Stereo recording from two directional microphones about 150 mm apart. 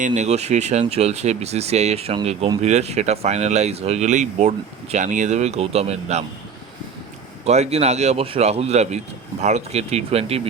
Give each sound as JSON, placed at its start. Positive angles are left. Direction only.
{"t": 0.0, "sound": "speech", "side_deg": -50}
{"t": 7.4, "sound": "speech", "side_deg": -45}